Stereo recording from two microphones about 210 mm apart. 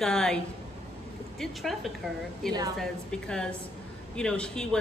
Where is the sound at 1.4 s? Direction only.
Centre (ahead or behind).